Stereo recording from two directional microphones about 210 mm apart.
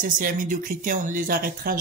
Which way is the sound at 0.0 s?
40° right (ahead or behind).